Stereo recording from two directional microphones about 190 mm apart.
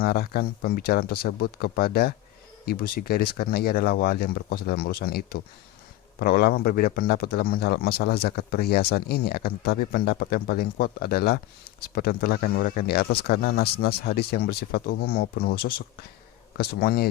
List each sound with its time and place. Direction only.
0.0 s a man's voice: 50° left (ahead or behind)